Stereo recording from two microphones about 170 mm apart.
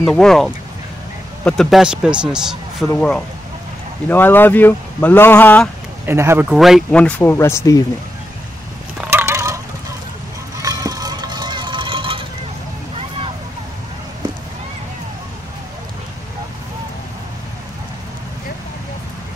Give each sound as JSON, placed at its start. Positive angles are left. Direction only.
{"t": 0.0, "sound": "a man's voice", "side_deg": 5}
{"t": 6.0, "sound": "speech", "side_deg": -15}
{"t": 9.0, "sound": "a sound", "side_deg": -15}
{"t": 10.6, "sound": "vehicle", "side_deg": -20}